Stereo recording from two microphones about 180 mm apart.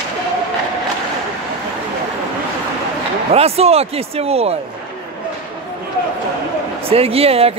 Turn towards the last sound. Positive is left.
turn(degrees=-35)  # may be behind; listen again after turning